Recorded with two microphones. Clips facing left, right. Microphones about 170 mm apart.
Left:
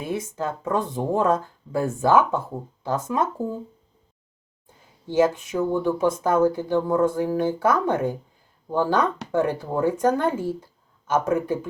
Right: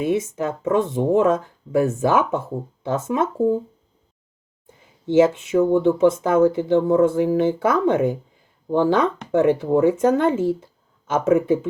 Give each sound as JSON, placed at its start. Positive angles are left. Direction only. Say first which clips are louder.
{"t": 0.0, "sound": "speech", "louder": "right 6 dB", "side_deg": -20}
{"t": 5.0, "sound": "speech", "louder": "right 4 dB", "side_deg": -20}